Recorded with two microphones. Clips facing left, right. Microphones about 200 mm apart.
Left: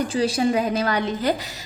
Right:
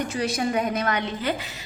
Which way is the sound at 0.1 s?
30° left (ahead or behind).